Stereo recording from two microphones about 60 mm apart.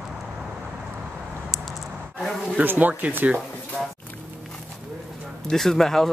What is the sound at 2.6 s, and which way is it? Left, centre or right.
Speech, right.